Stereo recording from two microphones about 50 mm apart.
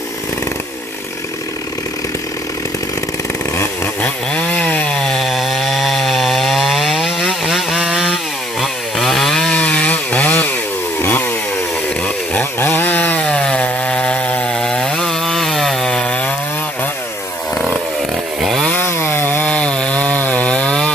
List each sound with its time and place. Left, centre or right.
4.4 s chainsaw: left
4.9 s chainsaw: centre
9.5 s chainsaw: left
12.5 s chainsaw: left
13.2 s wood: centre
13.8 s chainsaw: centre
14.5 s chainsaw: centre
18.9 s chainsaw: left
19.4 s chainsaw: left